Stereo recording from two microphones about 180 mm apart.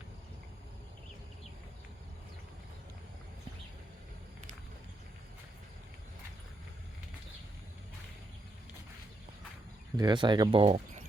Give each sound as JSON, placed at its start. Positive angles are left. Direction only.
{"t": 10.0, "sound": "speech", "side_deg": -25}